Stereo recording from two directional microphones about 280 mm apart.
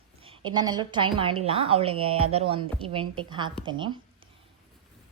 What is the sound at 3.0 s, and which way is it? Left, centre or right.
Speech, right.